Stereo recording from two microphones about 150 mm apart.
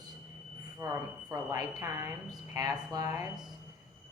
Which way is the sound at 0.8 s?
20° right (ahead or behind).